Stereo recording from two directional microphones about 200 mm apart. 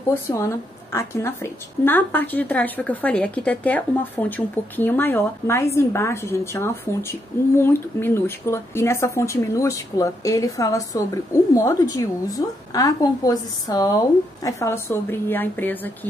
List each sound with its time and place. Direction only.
0.1 s a woman's voice: 15° left (ahead or behind)